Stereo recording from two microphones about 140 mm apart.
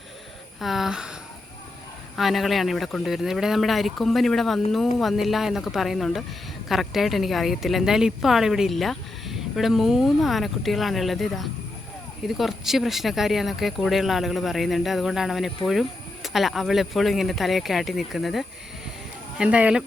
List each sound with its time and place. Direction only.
0.6 s speech: centre (ahead or behind)
2.1 s speech: centre (ahead or behind)